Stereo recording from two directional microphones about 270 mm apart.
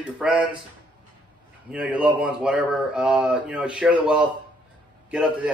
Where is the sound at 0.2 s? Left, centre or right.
Centre.